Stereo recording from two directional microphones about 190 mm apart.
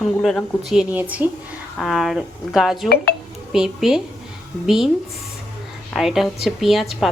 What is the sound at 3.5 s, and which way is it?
A woman's voice, 5° right (ahead or behind).